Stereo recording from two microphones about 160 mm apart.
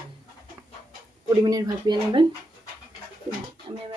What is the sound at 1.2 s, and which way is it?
Speech, 25° right (ahead or behind).